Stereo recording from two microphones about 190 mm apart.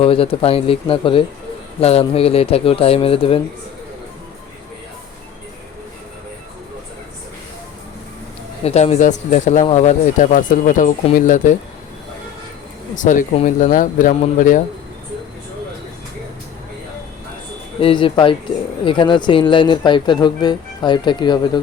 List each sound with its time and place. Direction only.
0.0 s speech: 30° left (ahead or behind)
8.6 s speech: 35° left (ahead or behind)
13.0 s speech: 40° left (ahead or behind)
17.7 s speech: 30° left (ahead or behind)